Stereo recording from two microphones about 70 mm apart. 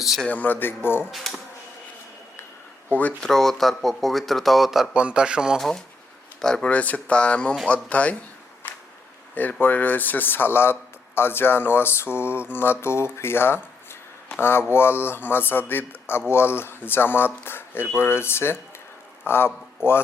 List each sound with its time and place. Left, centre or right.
0.3 s speech: left
3.2 s speech: centre
5.5 s speech: centre
6.7 s speech: left
9.3 s a man's voice: left